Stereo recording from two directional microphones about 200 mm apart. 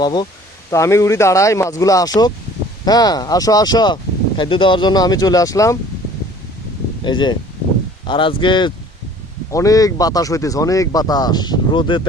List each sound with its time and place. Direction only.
0.0 s speech: 20° left (ahead or behind)
7.0 s speech: 20° left (ahead or behind)